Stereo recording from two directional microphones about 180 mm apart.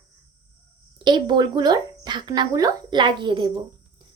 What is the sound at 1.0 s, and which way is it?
Speech, 25° right (ahead or behind).